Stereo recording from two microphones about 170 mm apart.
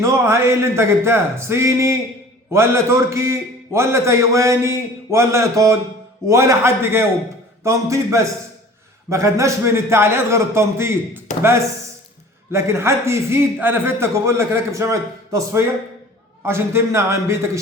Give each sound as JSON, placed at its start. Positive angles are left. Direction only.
{"t": 0.0, "sound": "a man's voice", "side_deg": -15}
{"t": 12.5, "sound": "a man's voice", "side_deg": -15}